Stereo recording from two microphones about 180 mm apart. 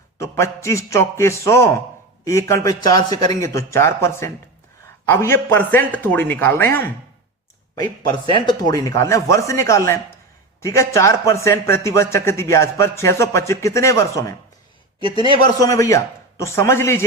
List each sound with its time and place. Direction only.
0.2 s a man's voice: 15° left (ahead or behind)
8.3 s a man's voice: 25° left (ahead or behind)